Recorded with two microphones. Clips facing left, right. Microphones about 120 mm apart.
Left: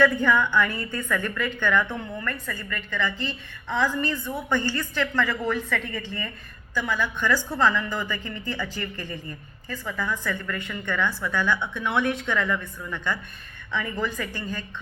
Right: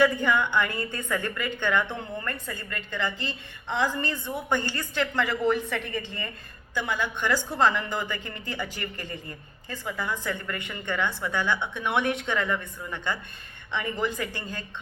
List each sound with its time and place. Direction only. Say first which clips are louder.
0.0 s a woman's voice: left 2 dB; 20° right (ahead or behind)